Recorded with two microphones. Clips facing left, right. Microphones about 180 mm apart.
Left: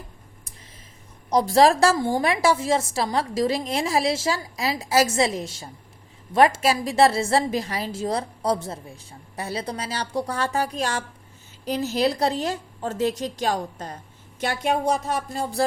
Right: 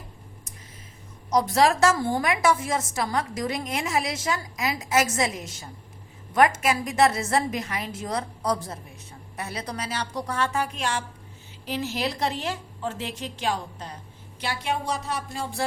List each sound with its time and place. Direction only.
1.3 s a woman's voice: 30° left (ahead or behind)
2.0 s a woman's voice: 20° left (ahead or behind); by 15.6 s 40° left (ahead or behind)